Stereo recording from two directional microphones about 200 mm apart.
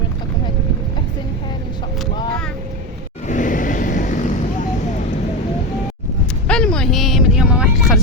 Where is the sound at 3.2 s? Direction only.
40° left (ahead or behind).